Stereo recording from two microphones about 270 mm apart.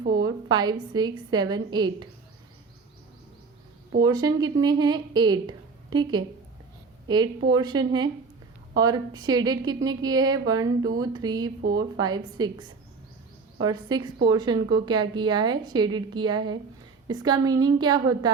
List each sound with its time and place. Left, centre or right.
0.2 s a woman's voice: centre
4.0 s a woman's voice: centre
7.5 s a woman's voice: centre